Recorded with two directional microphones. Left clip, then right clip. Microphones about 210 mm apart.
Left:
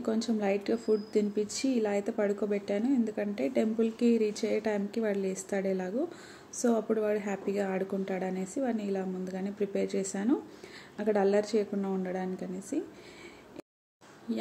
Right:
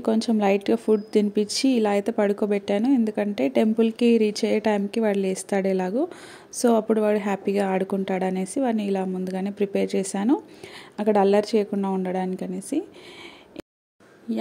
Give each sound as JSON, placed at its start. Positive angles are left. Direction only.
{"t": 0.0, "sound": "speech", "side_deg": -40}
{"t": 14.3, "sound": "speech", "side_deg": -35}